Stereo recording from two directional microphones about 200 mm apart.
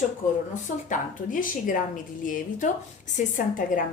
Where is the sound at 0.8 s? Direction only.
40° left (ahead or behind).